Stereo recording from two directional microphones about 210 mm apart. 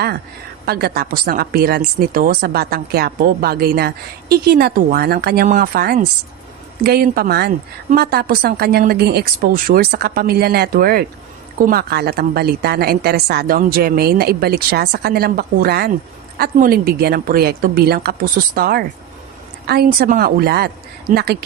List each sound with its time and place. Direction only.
0.6 s speech: 50° right (ahead or behind)